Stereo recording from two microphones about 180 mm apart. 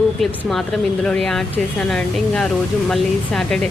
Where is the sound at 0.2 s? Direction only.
Centre (ahead or behind).